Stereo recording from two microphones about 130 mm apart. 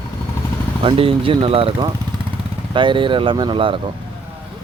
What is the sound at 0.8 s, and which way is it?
Speech, 45° right (ahead or behind).